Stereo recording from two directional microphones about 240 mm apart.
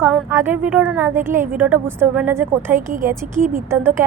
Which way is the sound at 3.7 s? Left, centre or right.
Centre.